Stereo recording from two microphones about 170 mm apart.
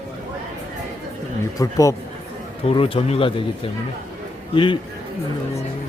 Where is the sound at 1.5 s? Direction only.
20° left (ahead or behind).